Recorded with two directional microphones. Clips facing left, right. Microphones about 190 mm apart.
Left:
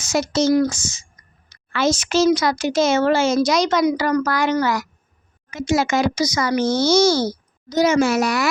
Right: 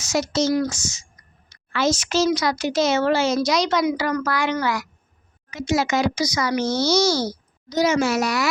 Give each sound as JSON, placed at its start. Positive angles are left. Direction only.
{"t": 0.0, "sound": "speech", "side_deg": 55}